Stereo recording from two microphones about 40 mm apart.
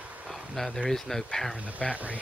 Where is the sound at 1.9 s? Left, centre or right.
Right.